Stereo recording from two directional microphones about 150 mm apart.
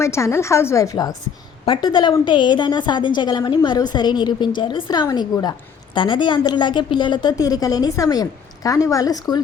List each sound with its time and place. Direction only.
0.0 s a woman's voice: 20° left (ahead or behind)
1.6 s a woman's voice: 35° left (ahead or behind)